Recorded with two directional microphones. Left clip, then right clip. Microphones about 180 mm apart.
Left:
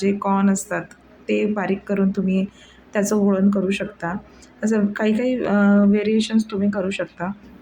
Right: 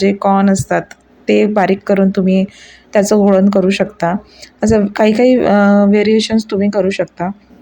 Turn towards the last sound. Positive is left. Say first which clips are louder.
# right 9 dB
turn(degrees=-25)  # may be behind; listen again after turning